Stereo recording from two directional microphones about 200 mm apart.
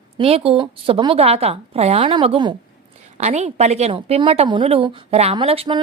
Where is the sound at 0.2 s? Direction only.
30° right (ahead or behind).